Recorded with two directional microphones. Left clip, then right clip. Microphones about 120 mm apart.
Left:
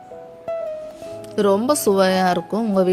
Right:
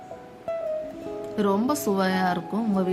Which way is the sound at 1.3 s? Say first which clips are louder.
Left 7 dB; 90° left.